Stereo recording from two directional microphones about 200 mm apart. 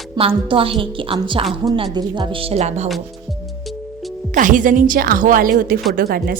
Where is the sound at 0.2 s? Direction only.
25° right (ahead or behind).